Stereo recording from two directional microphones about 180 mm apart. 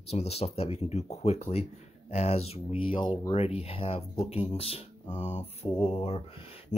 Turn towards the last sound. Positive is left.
turn(degrees=35)  # may be behind; listen again after turning